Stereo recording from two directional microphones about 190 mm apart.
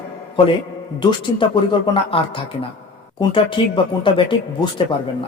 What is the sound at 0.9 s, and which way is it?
A man's voice, 25° left (ahead or behind).